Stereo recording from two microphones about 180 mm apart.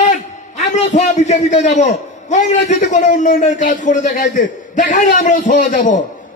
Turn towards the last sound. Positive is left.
turn(degrees=45)  # may be behind; listen again after turning